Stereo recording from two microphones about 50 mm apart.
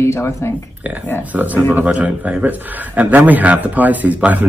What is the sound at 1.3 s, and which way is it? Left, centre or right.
A man's voice, right.